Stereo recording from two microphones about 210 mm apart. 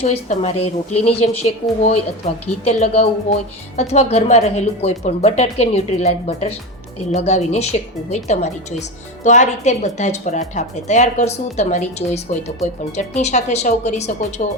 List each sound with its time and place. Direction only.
0.0 s a woman's voice: 30° left (ahead or behind)